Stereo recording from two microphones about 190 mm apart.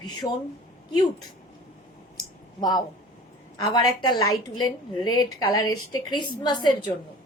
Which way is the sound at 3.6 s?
20° left (ahead or behind).